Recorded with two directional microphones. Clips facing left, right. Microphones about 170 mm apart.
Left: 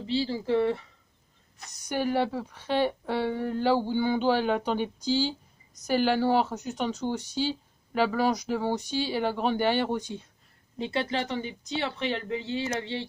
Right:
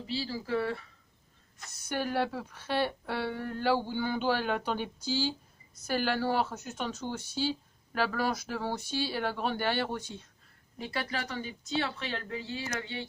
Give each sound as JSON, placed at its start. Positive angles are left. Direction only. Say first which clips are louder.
{"t": 0.1, "sound": "a woman's voice", "louder": "left 6 dB", "side_deg": 25}